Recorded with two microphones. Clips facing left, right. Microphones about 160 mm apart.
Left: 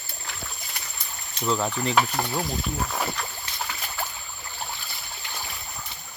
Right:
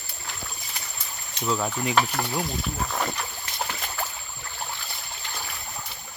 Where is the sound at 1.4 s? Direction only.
Centre (ahead or behind).